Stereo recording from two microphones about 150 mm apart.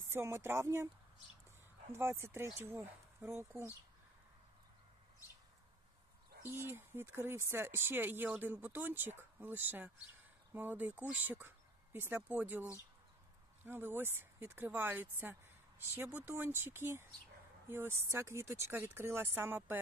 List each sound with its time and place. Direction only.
0.1 s speech: 15° right (ahead or behind)
1.9 s speech: 15° right (ahead or behind)
6.5 s speech: 15° right (ahead or behind)